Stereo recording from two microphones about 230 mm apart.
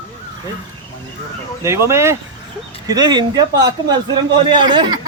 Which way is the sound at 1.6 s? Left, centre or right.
Centre.